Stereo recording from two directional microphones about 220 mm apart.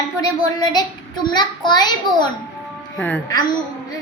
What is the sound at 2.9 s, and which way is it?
Speech, 5° left (ahead or behind).